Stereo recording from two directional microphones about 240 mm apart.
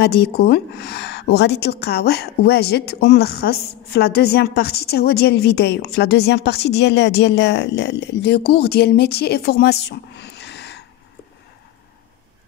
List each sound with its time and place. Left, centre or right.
0.0 s a woman's voice: left